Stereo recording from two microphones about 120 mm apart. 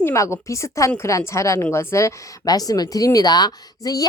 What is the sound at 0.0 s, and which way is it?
A woman's voice, 25° left (ahead or behind).